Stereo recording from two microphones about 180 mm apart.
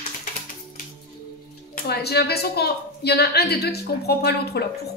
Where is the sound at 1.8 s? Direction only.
65° left (ahead or behind).